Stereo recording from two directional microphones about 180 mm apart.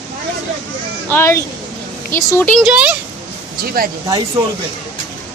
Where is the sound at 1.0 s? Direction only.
15° left (ahead or behind).